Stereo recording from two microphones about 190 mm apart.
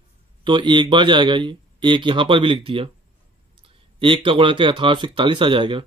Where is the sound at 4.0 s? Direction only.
25° right (ahead or behind).